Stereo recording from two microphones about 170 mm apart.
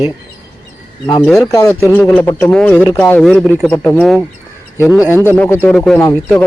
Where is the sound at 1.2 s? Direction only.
20° left (ahead or behind).